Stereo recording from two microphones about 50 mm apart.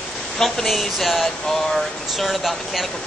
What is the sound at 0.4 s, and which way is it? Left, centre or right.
Speech, centre.